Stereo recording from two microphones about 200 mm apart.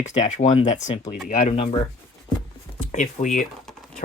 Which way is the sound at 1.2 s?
45° left (ahead or behind).